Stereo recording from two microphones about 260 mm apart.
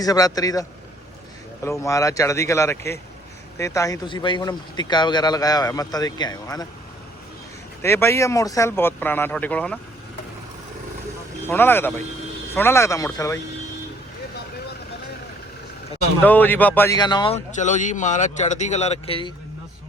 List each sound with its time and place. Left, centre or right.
0.0 s speech: centre
1.6 s speech: centre
7.8 s speech: centre
11.4 s speech: centre
16.2 s speech: centre